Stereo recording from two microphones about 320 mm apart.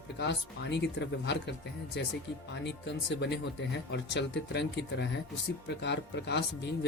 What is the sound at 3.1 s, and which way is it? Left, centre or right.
Speech, left.